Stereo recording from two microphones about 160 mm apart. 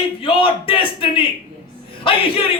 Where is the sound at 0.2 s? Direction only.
35° left (ahead or behind).